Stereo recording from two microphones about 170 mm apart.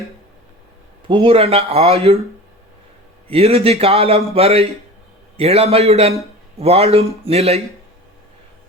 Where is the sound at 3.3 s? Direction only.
35° right (ahead or behind).